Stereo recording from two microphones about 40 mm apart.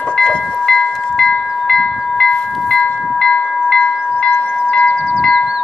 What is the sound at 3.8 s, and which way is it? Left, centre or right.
Wind chime, left.